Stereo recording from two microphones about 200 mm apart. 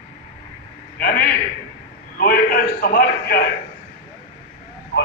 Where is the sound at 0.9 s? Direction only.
50° left (ahead or behind).